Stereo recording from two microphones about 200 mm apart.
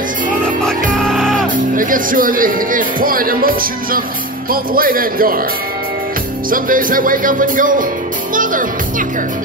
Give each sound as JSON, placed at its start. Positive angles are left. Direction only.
{"t": 0.9, "sound": "music", "side_deg": 0}
{"t": 1.5, "sound": "speech", "side_deg": -40}
{"t": 6.5, "sound": "speech", "side_deg": -45}